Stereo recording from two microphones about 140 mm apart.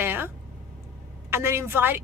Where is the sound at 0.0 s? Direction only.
15° right (ahead or behind).